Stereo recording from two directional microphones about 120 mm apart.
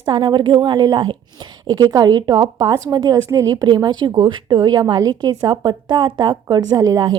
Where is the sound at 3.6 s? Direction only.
40° right (ahead or behind).